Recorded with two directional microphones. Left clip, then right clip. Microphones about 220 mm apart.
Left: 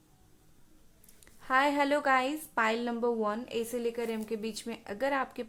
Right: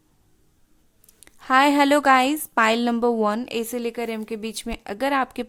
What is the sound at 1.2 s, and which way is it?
A woman's voice, 45° right (ahead or behind).